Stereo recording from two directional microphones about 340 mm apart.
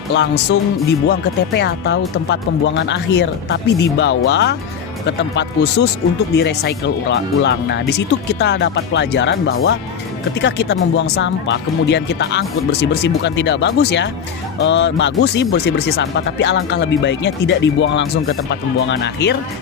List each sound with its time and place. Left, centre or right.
0.1 s speech: left